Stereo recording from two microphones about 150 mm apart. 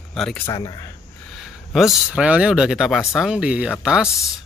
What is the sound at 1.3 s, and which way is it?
Speech, centre (ahead or behind).